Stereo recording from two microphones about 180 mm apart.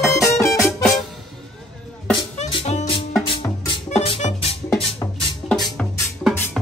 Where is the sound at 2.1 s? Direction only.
30° left (ahead or behind).